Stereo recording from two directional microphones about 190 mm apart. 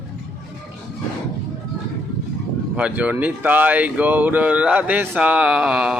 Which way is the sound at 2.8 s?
10° right (ahead or behind).